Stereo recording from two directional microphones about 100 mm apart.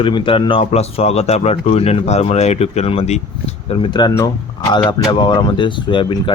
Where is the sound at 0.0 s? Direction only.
55° left (ahead or behind).